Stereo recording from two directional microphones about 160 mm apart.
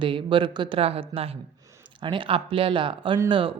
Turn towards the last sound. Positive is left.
turn(degrees=-30)  # may be behind; listen again after turning